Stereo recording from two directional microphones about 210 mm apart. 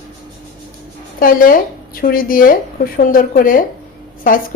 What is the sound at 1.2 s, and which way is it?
A woman's voice, 40° left (ahead or behind).